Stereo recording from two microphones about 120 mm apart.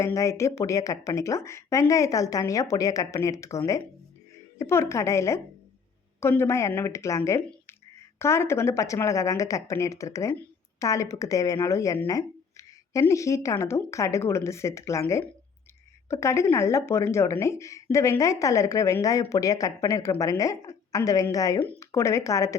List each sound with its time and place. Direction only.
0.0 s speech: 25° left (ahead or behind)